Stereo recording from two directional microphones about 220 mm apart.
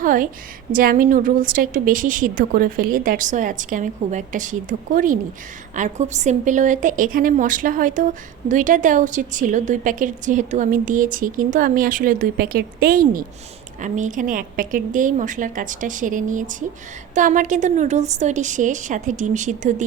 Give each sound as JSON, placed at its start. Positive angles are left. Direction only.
{"t": 0.0, "sound": "a woman's voice", "side_deg": -35}